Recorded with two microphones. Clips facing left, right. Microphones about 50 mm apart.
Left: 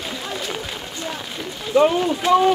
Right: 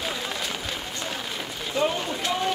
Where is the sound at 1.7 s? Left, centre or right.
Centre.